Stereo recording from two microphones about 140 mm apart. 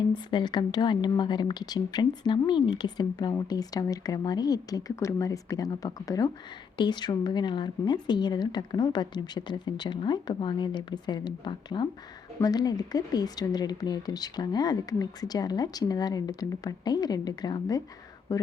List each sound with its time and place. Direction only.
0.3 s a woman's voice: 30° left (ahead or behind)